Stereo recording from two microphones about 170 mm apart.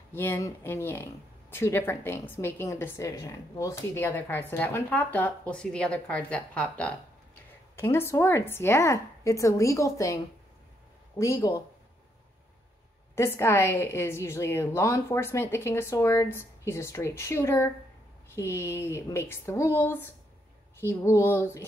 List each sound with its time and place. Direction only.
0.1 s speech: 15° left (ahead or behind)
11.1 s speech: 20° left (ahead or behind)
13.1 s speech: 15° left (ahead or behind)